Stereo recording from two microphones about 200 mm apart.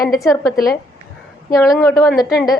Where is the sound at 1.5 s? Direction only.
15° left (ahead or behind).